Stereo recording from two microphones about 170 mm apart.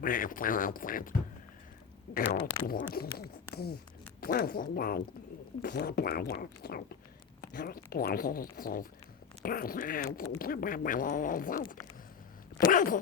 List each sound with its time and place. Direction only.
0.0 s speech: 55° left (ahead or behind)
12.7 s speech: 50° left (ahead or behind)